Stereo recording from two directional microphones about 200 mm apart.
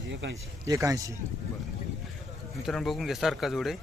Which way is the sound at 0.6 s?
15° right (ahead or behind).